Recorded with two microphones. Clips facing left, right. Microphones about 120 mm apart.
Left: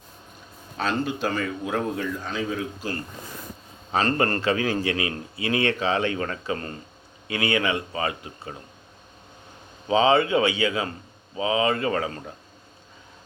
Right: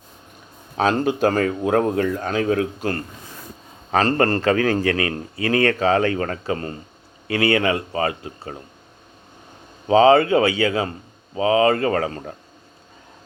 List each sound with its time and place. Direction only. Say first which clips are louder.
0.8 s speech: right 7 dB; 50° right (ahead or behind)
4.0 s a man's voice: right 4 dB; 40° right (ahead or behind)
9.8 s a man's voice: right 6 dB; 40° right (ahead or behind)